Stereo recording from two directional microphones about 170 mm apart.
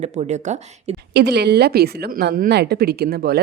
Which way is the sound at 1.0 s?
75° right (ahead or behind).